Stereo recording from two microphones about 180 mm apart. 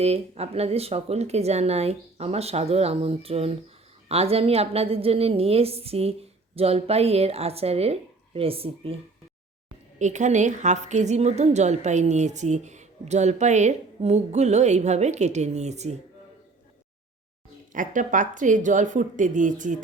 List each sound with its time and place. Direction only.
0.0 s a woman's voice: 35° right (ahead or behind)
10.0 s a woman's voice: 40° right (ahead or behind)
17.7 s speech: 45° right (ahead or behind)